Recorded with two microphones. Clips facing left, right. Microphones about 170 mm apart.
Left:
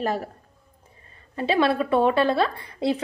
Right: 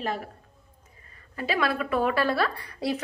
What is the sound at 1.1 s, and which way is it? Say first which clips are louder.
A woman's voice: left 5 dB; 25° left (ahead or behind).